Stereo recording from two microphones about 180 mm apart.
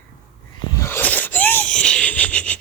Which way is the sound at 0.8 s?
10° left (ahead or behind).